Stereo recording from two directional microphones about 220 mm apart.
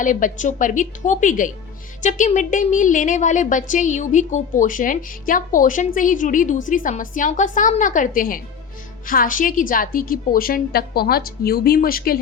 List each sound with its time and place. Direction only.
0.0 s a woman's voice: 35° left (ahead or behind)